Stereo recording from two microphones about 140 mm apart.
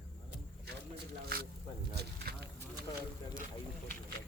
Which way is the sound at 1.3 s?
90° right.